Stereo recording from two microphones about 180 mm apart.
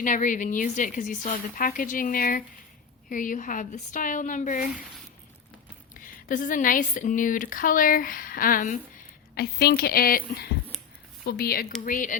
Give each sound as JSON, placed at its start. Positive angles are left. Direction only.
{"t": 0.0, "sound": "speech", "side_deg": 45}
{"t": 5.9, "sound": "speech", "side_deg": 50}
{"t": 9.3, "sound": "a woman's voice", "side_deg": 60}